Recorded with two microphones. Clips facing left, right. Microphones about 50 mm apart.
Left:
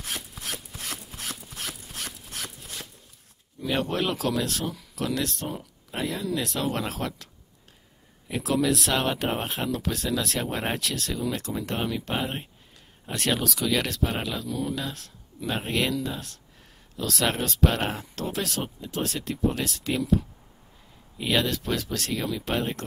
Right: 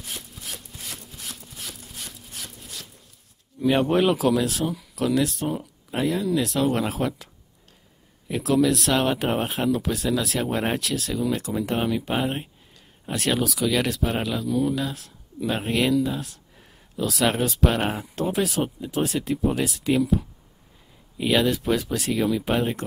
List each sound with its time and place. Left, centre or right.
0.7 s wood: left
2.0 s a sound: left
3.6 s speech: centre
8.3 s speech: centre